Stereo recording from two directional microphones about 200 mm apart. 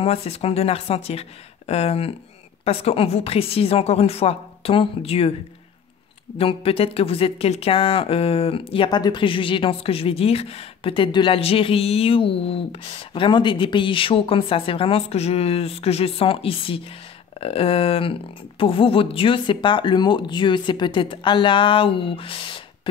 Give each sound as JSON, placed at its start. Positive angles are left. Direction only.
{"t": 0.0, "sound": "speech", "side_deg": 30}
{"t": 6.3, "sound": "speech", "side_deg": 30}